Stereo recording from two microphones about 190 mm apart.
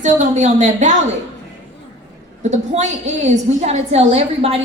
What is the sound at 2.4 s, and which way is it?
A woman's voice, 35° right (ahead or behind).